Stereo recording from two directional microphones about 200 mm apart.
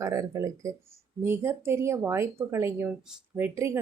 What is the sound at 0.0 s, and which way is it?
Speech, 15° right (ahead or behind).